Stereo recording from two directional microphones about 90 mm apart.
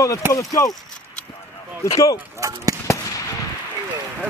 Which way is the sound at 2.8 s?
35° left (ahead or behind).